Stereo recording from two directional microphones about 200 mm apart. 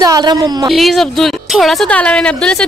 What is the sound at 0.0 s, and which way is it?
Speech, 20° right (ahead or behind).